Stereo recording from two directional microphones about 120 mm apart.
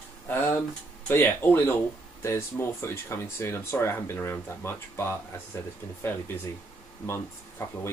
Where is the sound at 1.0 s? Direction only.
15° left (ahead or behind).